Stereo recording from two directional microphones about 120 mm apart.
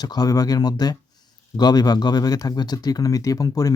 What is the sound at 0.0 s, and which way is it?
Speech, 35° left (ahead or behind).